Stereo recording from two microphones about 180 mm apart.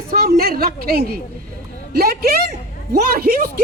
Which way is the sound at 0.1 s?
55° right (ahead or behind).